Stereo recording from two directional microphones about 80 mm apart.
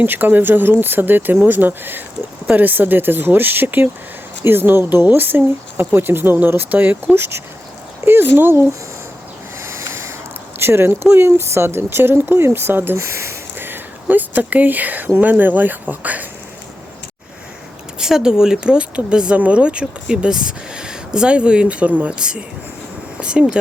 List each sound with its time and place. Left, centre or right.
0.0 s speech: right
9.6 s a sound: right
10.6 s speech: right
18.0 s speech: centre